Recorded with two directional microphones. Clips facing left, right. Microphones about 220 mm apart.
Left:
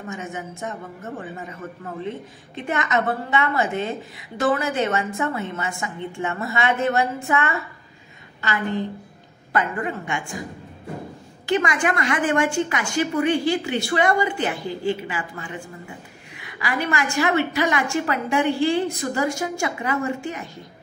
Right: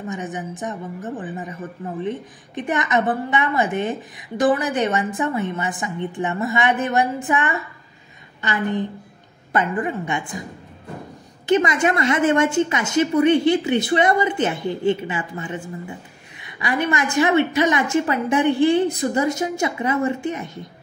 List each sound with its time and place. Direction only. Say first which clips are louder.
0.1 s a woman's voice: right 2 dB; 20° right (ahead or behind)
11.4 s a woman's voice: right 4 dB; 20° right (ahead or behind)